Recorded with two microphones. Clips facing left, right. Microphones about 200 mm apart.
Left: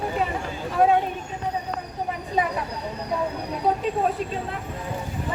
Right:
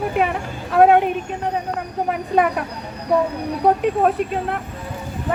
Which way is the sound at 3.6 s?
65° right (ahead or behind).